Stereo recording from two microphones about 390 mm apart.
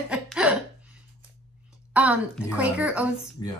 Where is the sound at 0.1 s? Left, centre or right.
Centre.